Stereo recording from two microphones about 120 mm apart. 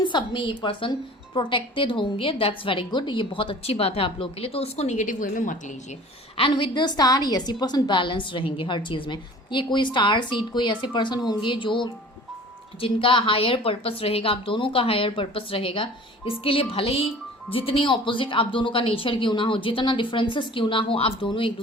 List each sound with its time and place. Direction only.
0.0 s a woman's voice: 40° left (ahead or behind); by 5.7 s 90° left
6.3 s a woman's voice: 45° left (ahead or behind)